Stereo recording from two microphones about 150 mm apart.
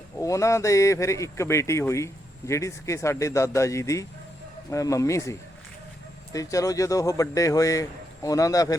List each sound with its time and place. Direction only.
0.2 s speech: 20° left (ahead or behind)